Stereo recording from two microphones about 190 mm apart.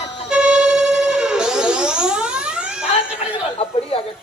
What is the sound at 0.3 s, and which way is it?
Music, 5° right (ahead or behind).